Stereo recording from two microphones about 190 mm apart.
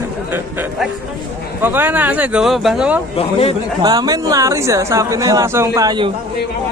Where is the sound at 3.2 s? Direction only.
30° left (ahead or behind).